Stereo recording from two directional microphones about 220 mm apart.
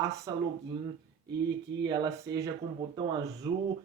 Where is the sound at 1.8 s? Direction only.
20° right (ahead or behind).